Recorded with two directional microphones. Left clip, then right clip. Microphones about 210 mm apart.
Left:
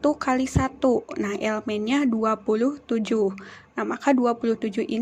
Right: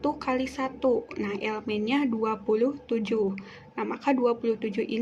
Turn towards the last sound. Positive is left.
turn(degrees=30)  # may be behind; listen again after turning